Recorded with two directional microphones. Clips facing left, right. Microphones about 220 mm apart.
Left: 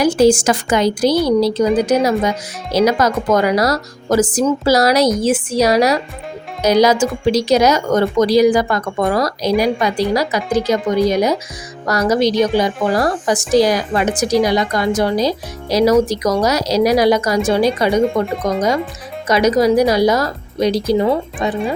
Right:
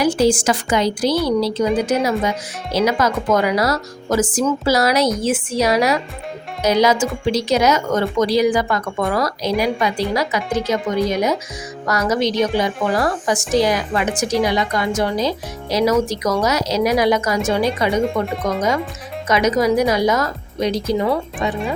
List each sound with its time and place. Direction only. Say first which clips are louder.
0.0 s a woman's voice: left 4 dB; 45° left (ahead or behind)